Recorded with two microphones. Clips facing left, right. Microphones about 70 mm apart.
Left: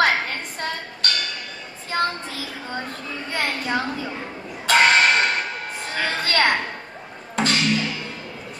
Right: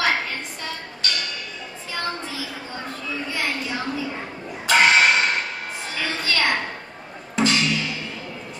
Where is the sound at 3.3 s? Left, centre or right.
Left.